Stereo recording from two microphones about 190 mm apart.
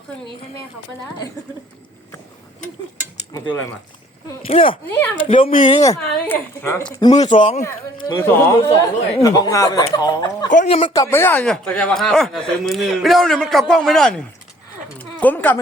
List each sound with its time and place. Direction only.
3.3 s speech: 20° left (ahead or behind)
4.4 s speech: 30° left (ahead or behind)
4.9 s a woman's voice: 10° left (ahead or behind)
5.3 s speech: 40° left (ahead or behind)
5.6 s speech: 20° left (ahead or behind)
6.1 s a woman's voice: 10° left (ahead or behind)
7.2 s speech: 30° left (ahead or behind)
7.6 s a woman's voice: 20° left (ahead or behind)
10.5 s speech: 40° left (ahead or behind)
10.9 s speech: 15° left (ahead or behind)